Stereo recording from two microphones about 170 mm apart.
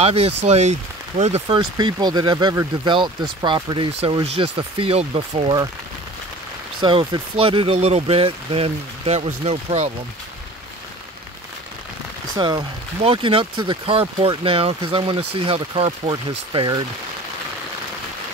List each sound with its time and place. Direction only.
0.0 s speech: 35° right (ahead or behind)
6.8 s speech: 30° right (ahead or behind)
12.4 s speech: 25° right (ahead or behind)